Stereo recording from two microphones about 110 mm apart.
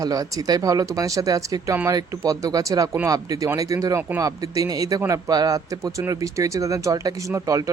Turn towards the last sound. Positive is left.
turn(degrees=-35)  # may be behind; listen again after turning